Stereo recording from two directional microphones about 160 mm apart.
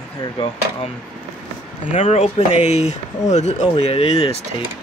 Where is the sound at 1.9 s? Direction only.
45° left (ahead or behind).